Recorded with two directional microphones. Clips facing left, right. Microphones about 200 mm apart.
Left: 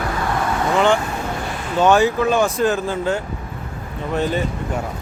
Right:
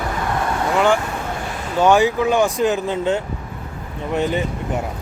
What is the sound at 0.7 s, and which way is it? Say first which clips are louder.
Speech: even; 10° right (ahead or behind).